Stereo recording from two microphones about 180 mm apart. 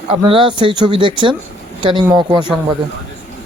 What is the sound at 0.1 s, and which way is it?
Speech, 30° right (ahead or behind).